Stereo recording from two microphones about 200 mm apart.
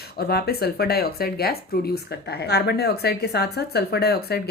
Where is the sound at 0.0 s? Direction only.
50° left (ahead or behind).